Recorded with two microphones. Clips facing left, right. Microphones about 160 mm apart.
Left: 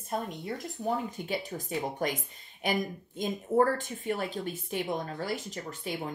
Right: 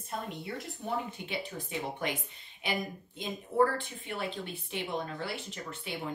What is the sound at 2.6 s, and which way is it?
A woman's voice, 45° left (ahead or behind).